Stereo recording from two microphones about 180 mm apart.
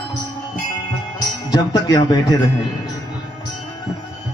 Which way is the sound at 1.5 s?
25° left (ahead or behind).